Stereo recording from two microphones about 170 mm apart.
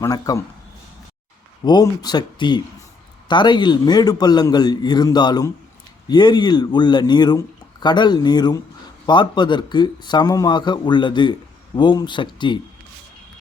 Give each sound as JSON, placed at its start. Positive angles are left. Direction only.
{"t": 0.0, "sound": "a man's voice", "side_deg": 20}
{"t": 1.6, "sound": "a man's voice", "side_deg": 25}